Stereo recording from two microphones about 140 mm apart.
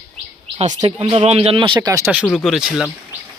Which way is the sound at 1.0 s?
45° right (ahead or behind).